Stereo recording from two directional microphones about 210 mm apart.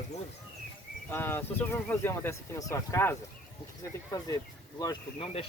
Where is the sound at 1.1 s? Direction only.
10° left (ahead or behind).